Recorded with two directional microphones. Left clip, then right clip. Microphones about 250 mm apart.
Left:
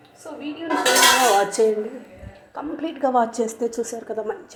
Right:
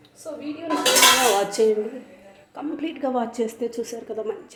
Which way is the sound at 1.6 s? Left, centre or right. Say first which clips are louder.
Left 1 dB; centre.